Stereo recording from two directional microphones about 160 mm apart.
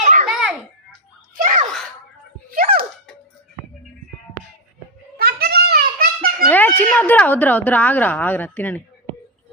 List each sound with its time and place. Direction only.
0.0 s children playing: 55° right (ahead or behind)
0.3 s children playing: 5° right (ahead or behind)
1.4 s gasp: 55° right (ahead or behind)
2.5 s a sound: 65° right (ahead or behind)
5.1 s a sound: 75° right (ahead or behind)
6.5 s speech: 10° left (ahead or behind)